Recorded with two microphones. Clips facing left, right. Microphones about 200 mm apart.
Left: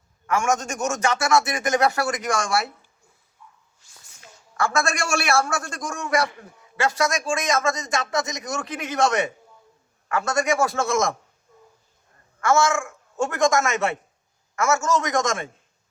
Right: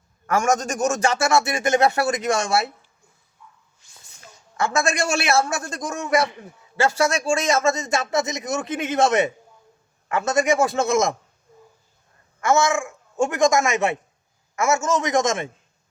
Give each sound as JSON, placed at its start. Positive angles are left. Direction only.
{"t": 0.3, "sound": "a man's voice", "side_deg": -40}
{"t": 4.5, "sound": "a man's voice", "side_deg": -20}
{"t": 12.4, "sound": "a man's voice", "side_deg": -20}